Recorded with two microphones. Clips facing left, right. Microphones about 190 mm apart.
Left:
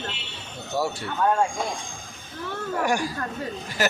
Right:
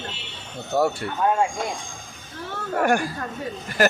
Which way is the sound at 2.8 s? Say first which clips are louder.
Right 4 dB; 55° right (ahead or behind).